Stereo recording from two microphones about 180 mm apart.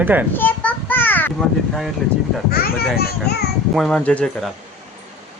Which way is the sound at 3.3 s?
60° left (ahead or behind).